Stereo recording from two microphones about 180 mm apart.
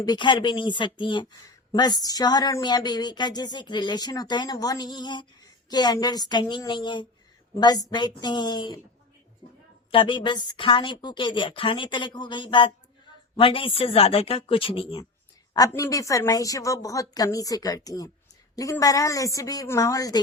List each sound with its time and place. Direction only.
0.0 s speech: 25° left (ahead or behind)
9.9 s speech: 30° left (ahead or behind)
15.5 s speech: 20° left (ahead or behind)